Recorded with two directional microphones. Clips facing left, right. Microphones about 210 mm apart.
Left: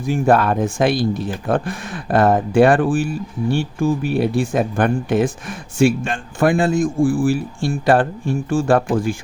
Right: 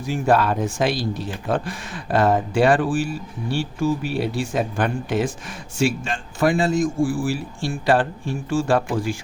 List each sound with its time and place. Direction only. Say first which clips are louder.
0.1 s speech: left 3 dB; 55° left (ahead or behind)